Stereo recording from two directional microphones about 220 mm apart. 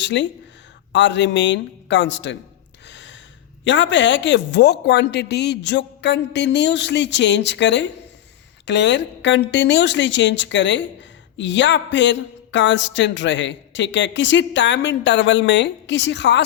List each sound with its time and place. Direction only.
0.0 s a woman's voice: 55° left (ahead or behind)
2.8 s gasp: 55° left (ahead or behind)
3.6 s a woman's voice: 55° left (ahead or behind)